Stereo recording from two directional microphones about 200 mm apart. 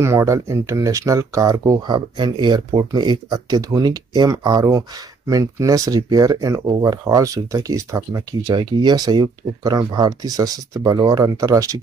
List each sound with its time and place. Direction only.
0.0 s speech: 15° right (ahead or behind)